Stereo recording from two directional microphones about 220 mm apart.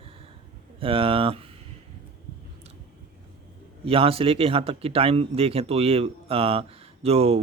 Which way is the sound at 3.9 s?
25° right (ahead or behind).